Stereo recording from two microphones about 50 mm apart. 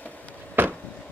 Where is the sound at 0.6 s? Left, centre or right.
Right.